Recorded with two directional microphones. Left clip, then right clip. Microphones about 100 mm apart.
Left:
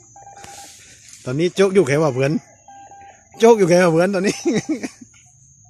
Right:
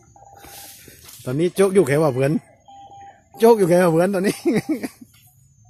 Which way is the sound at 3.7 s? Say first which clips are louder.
Left 2 dB; 10° left (ahead or behind).